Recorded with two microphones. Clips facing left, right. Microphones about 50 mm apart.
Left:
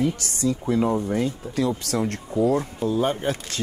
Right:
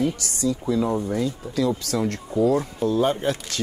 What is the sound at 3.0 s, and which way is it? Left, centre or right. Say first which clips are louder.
Speech: right 2 dB; left.